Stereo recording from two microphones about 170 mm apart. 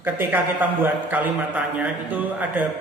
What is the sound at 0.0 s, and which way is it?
A man's voice, 10° right (ahead or behind).